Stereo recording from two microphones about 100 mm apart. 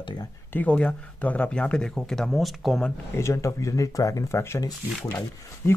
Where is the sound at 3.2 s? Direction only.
30° left (ahead or behind).